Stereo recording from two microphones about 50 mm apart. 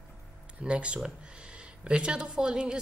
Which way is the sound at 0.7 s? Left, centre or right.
Right.